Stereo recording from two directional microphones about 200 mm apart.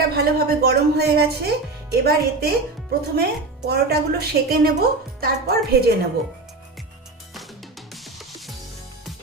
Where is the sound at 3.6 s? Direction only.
50° right (ahead or behind).